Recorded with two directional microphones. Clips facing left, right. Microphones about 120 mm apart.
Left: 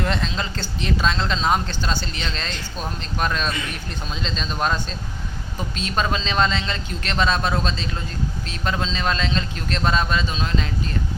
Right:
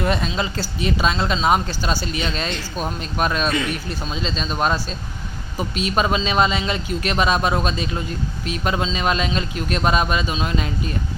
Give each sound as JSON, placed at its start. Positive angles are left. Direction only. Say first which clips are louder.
{"t": 0.0, "sound": "speech", "louder": "right 3 dB", "side_deg": -10}